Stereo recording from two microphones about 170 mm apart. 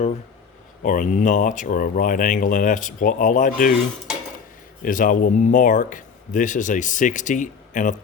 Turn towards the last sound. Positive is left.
turn(degrees=50)  # may be behind; listen again after turning